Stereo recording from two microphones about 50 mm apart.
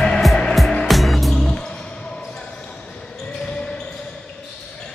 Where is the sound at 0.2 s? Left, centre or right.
Centre.